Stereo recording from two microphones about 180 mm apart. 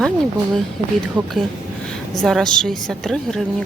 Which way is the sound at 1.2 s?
25° right (ahead or behind).